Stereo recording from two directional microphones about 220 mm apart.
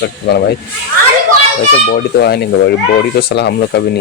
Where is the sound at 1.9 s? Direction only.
45° left (ahead or behind).